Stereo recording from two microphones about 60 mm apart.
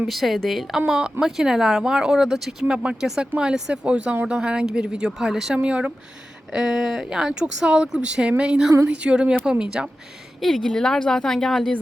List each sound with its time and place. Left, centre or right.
0.1 s a woman's voice: centre
5.5 s speech: centre
6.5 s speech: centre
10.4 s a woman's voice: centre